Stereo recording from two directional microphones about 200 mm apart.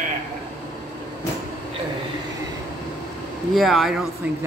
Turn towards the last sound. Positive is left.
turn(degrees=-5)  # may be behind; listen again after turning